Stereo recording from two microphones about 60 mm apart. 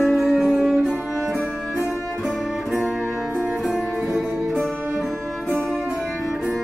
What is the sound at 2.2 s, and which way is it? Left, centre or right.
Music, centre.